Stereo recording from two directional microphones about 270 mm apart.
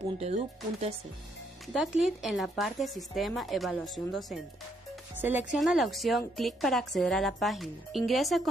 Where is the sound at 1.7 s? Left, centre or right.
Centre.